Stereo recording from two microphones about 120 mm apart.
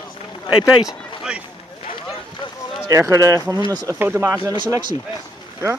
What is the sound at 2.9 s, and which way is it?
Speech, 25° right (ahead or behind).